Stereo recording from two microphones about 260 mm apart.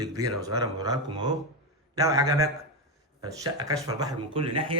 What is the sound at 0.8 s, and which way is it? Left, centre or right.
A man's voice, centre.